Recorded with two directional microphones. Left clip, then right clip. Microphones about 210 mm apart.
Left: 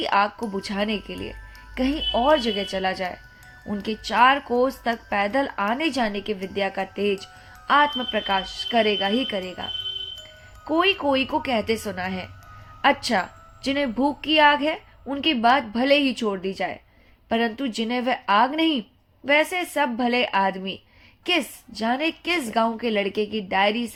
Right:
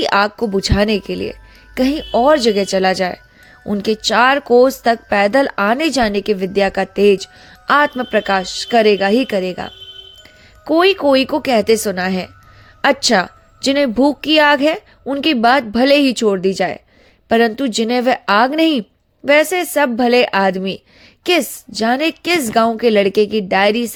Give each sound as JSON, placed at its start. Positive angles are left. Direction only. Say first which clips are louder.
{"t": 0.0, "sound": "a woman's voice", "louder": "right 7 dB", "side_deg": -50}